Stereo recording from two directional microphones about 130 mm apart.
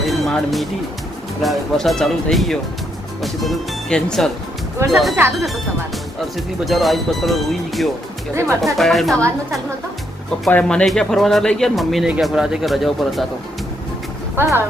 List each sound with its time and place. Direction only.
0.0 s music: centre (ahead or behind)
1.4 s speech: centre (ahead or behind)
6.3 s speech: centre (ahead or behind)
10.5 s speech: 10° left (ahead or behind)
14.3 s speech: 20° right (ahead or behind)